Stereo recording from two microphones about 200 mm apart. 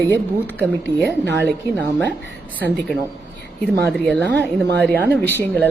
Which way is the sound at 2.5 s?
10° left (ahead or behind).